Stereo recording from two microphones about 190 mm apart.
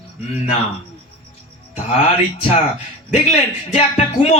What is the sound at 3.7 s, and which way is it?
Speech, 35° left (ahead or behind).